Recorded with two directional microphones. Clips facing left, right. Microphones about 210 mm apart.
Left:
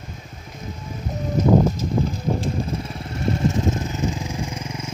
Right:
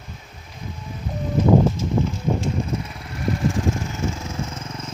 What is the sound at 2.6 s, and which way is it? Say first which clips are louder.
Vehicle: even; 35° left (ahead or behind).